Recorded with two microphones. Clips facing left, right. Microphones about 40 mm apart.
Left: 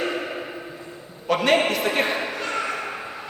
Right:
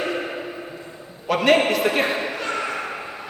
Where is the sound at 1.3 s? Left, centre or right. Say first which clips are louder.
Right 2 dB; centre.